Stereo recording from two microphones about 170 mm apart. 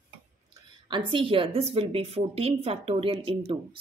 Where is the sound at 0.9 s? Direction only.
30° right (ahead or behind).